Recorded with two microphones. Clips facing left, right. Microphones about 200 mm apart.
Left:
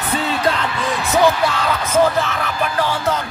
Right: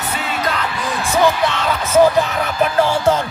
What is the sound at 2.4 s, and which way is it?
Music, 25° right (ahead or behind).